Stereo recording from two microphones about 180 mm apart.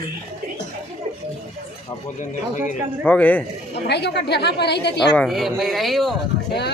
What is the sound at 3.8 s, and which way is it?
A woman's voice, 70° left (ahead or behind).